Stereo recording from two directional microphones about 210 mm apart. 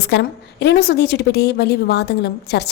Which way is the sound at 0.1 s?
55° left (ahead or behind).